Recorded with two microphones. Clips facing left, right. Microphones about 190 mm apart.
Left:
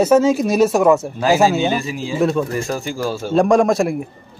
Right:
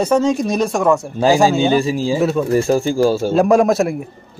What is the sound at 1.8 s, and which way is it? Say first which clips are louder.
Speech: right 7 dB; 30° right (ahead or behind).